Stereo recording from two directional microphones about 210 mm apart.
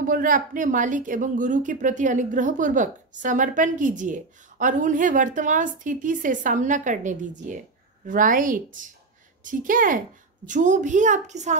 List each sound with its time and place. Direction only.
0.0 s a woman's voice: 40° right (ahead or behind)